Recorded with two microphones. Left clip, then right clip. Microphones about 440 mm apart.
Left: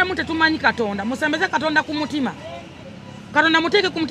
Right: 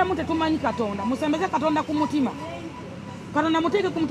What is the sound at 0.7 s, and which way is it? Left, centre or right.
A man's voice, left.